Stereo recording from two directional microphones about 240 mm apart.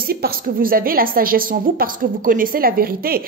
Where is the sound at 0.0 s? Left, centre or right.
Right.